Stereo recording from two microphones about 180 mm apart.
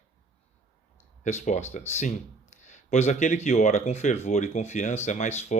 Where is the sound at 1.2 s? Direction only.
40° left (ahead or behind).